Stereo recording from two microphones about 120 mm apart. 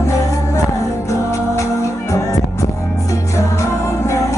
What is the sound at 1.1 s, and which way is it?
Music, 25° left (ahead or behind).